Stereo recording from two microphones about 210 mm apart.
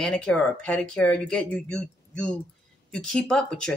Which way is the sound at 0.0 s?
5° left (ahead or behind).